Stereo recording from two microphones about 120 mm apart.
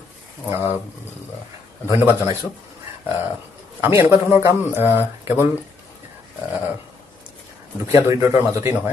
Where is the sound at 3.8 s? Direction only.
20° right (ahead or behind).